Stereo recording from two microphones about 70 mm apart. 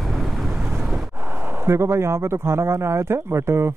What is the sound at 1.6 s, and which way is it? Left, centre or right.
Speech, right.